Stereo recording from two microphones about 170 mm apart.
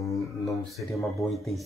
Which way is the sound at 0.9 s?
20° left (ahead or behind).